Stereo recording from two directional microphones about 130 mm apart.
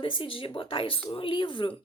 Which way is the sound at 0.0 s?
40° left (ahead or behind).